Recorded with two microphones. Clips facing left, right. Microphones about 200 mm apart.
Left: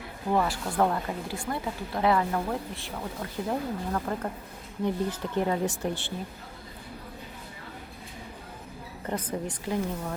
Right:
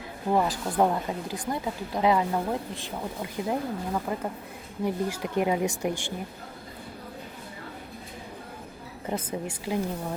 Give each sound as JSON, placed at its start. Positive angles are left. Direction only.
{"t": 0.3, "sound": "speech", "side_deg": -15}
{"t": 9.5, "sound": "speech", "side_deg": -15}